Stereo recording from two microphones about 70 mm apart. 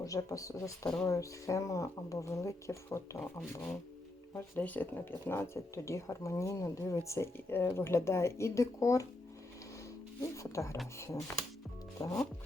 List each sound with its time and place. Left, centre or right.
0.0 s speech: left
5.7 s speech: left
7.3 s speech: left
10.2 s speech: left